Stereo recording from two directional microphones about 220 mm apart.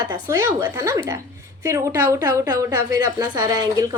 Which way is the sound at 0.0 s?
15° right (ahead or behind).